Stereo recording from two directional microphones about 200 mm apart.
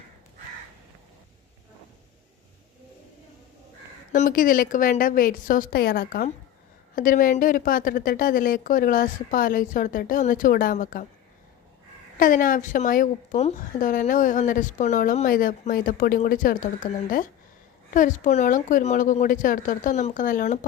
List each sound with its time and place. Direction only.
4.1 s a woman's voice: 45° left (ahead or behind)
12.2 s a woman's voice: 45° left (ahead or behind)